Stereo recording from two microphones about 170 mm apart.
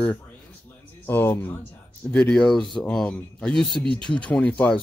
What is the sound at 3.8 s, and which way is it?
Speech, 30° right (ahead or behind).